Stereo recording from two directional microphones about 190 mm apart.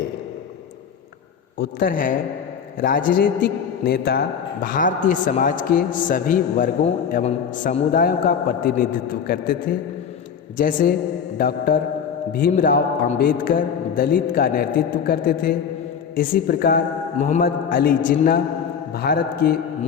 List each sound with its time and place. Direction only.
1.5 s a man's voice: 50° left (ahead or behind)